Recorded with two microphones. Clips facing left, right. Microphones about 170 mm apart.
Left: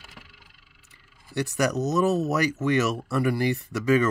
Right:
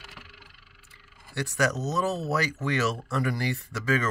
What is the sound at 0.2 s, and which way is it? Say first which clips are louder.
Vehicle: right 2 dB; 70° right (ahead or behind).